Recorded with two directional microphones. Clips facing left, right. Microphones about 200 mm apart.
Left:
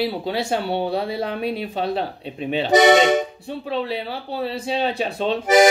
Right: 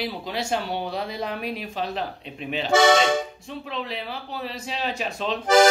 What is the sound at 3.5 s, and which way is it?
Speech, 35° left (ahead or behind).